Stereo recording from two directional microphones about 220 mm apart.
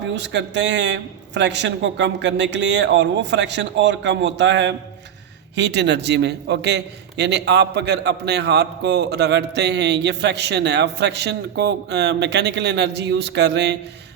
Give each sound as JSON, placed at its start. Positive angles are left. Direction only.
{"t": 0.2, "sound": "a man's voice", "side_deg": -50}